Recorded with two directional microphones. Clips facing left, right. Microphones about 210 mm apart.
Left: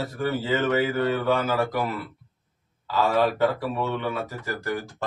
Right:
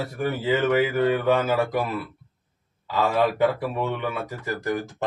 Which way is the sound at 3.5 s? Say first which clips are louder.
Even; 20° right (ahead or behind).